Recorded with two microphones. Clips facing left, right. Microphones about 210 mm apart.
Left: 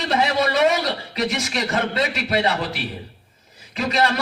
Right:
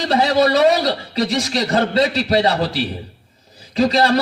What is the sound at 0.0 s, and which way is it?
A man's voice, 35° right (ahead or behind).